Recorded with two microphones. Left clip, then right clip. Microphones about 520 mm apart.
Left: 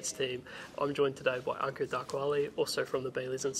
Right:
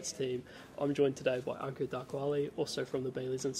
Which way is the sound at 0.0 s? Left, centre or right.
Left.